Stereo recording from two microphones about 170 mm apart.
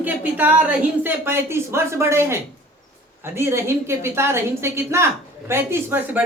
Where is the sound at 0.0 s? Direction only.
10° right (ahead or behind).